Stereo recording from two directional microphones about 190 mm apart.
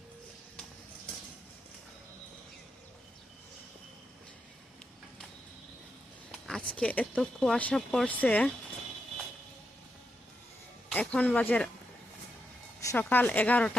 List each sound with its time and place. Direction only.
6.4 s speech: 5° left (ahead or behind)
10.8 s speech: 5° left (ahead or behind)
12.8 s speech: 15° left (ahead or behind)